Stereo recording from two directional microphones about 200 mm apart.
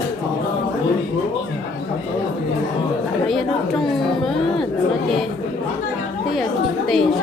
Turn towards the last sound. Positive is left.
turn(degrees=0)  # may be behind; listen again after turning